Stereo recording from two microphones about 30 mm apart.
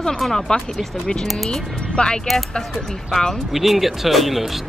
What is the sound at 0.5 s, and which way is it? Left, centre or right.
Speech, left.